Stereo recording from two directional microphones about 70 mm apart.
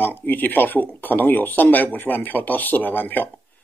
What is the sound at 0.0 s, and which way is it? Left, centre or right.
Speech, left.